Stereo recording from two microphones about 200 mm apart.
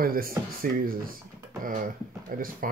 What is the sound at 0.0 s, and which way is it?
Speech, 45° right (ahead or behind).